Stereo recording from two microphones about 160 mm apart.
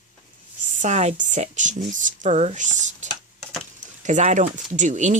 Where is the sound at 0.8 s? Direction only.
45° right (ahead or behind).